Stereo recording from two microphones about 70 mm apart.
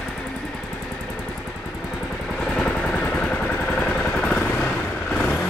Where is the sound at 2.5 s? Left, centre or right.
Centre.